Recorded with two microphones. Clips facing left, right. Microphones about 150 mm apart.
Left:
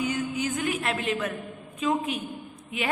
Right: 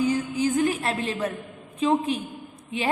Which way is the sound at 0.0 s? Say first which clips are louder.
Right 5 dB; 30° right (ahead or behind).